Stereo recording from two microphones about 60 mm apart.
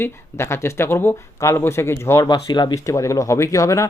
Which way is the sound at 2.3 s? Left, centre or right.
Left.